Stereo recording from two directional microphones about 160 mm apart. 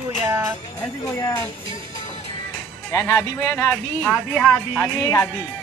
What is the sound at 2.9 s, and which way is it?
Speech, 20° left (ahead or behind).